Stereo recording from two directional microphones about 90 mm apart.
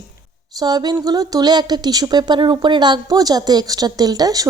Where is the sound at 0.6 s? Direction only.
50° right (ahead or behind).